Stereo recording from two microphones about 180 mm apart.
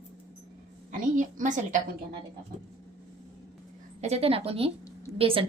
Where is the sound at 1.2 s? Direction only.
45° right (ahead or behind).